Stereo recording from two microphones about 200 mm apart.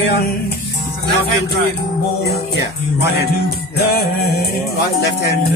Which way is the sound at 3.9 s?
50° left (ahead or behind).